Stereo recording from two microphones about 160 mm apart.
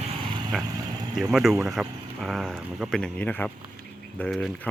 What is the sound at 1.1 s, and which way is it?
Speech, 5° right (ahead or behind).